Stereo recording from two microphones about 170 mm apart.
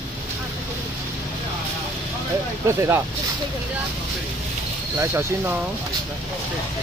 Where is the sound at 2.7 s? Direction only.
15° right (ahead or behind).